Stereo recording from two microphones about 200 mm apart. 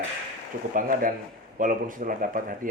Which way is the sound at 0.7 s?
45° right (ahead or behind).